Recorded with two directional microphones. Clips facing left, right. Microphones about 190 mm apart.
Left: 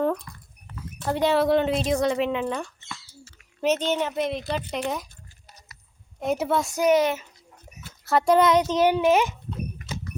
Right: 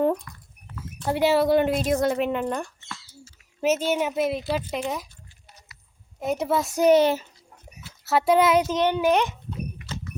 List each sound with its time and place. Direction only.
0.3 s rodents: 30° left (ahead or behind)
1.0 s speech: 5° right (ahead or behind)
5.5 s a sound: 40° left (ahead or behind)
6.1 s speech: centre (ahead or behind)
6.7 s speech: 30° right (ahead or behind)
8.0 s speech: 5° right (ahead or behind)
8.7 s a child's voice: 10° left (ahead or behind)
9.8 s a sound: 45° left (ahead or behind)